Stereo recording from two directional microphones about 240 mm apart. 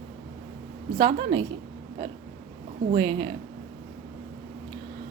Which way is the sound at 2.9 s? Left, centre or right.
Right.